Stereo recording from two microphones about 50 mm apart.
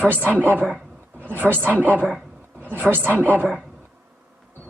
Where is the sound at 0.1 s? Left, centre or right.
Right.